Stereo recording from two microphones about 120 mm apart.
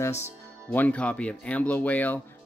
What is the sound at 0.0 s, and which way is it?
Speech, 20° left (ahead or behind).